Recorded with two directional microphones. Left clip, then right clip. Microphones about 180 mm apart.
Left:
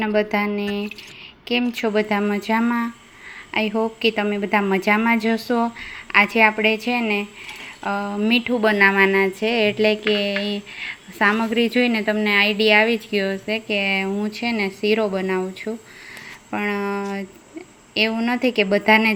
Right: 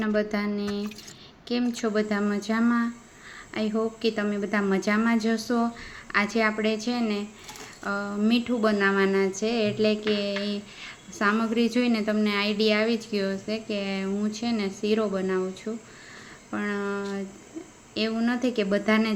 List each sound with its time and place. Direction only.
0.0 s speech: 10° left (ahead or behind)